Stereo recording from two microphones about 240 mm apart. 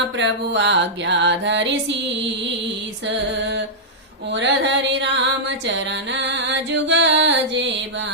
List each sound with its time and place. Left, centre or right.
0.2 s music: right
3.3 s music: right